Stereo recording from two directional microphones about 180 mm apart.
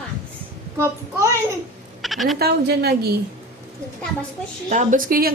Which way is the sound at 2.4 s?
60° right (ahead or behind).